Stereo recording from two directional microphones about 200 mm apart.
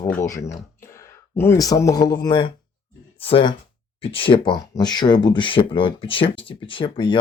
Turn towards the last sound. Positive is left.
turn(degrees=25)  # may be behind; listen again after turning